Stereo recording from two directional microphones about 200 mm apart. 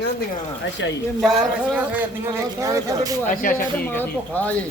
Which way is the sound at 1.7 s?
5° right (ahead or behind).